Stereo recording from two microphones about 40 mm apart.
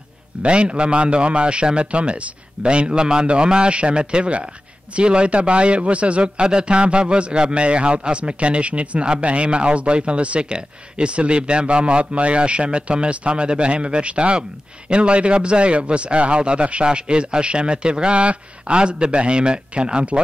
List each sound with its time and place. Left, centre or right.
0.4 s a man's voice: right